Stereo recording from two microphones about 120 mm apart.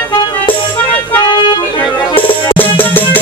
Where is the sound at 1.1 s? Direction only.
40° left (ahead or behind).